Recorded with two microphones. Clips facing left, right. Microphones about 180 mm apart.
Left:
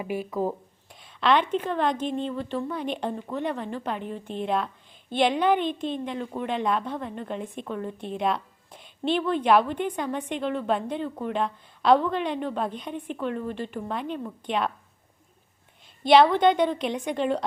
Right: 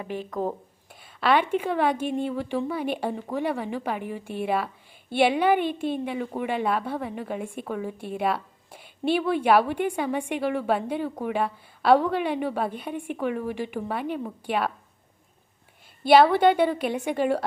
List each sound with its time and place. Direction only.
0.0 s a woman's voice: 10° left (ahead or behind); by 14.7 s 5° right (ahead or behind)
16.0 s a woman's voice: 5° right (ahead or behind)